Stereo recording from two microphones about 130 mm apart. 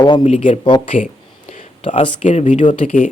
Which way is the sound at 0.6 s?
45° left (ahead or behind).